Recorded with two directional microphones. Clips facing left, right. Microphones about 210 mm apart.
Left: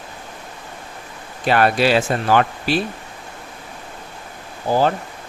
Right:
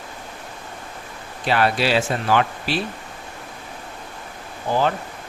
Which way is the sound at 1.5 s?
50° left (ahead or behind).